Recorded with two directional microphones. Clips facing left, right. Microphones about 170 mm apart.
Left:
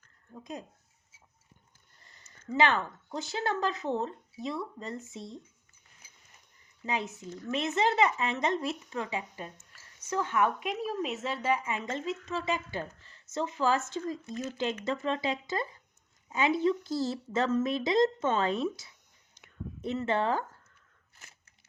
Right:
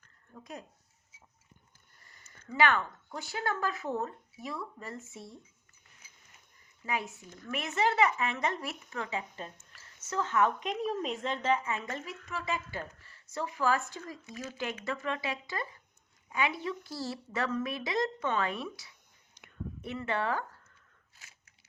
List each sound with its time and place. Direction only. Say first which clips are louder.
0.3 s speech: left 4 dB; 20° left (ahead or behind)
2.5 s speech: left 1 dB; 30° left (ahead or behind)
6.8 s speech: left 2 dB; 20° left (ahead or behind)